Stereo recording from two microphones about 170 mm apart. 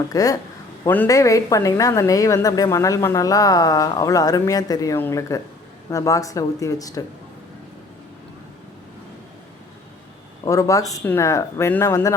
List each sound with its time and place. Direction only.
0.1 s a woman's voice: 20° left (ahead or behind)
10.4 s speech: 20° left (ahead or behind)